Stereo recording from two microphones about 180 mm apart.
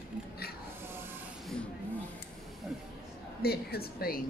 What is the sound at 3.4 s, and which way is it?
Speech, 60° left (ahead or behind).